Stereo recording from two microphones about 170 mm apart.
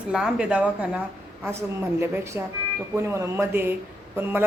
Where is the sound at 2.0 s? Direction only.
15° right (ahead or behind).